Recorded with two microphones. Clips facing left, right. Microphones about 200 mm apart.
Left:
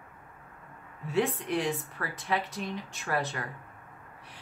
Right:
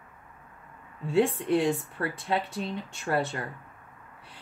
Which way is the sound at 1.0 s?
30° right (ahead or behind).